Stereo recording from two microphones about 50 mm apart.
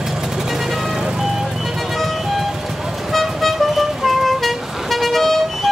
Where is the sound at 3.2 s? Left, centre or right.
Centre.